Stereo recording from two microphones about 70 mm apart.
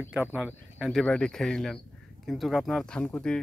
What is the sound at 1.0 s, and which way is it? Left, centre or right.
Speech, centre.